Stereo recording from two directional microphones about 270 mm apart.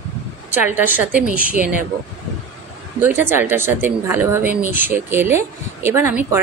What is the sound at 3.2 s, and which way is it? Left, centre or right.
Speech, centre.